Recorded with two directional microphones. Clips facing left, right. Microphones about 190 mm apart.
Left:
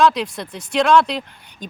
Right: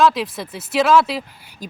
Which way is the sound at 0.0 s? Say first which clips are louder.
Even; centre (ahead or behind).